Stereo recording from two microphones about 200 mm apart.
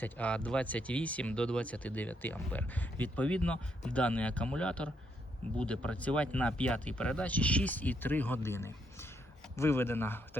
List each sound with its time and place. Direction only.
0.0 s speech: 5° left (ahead or behind)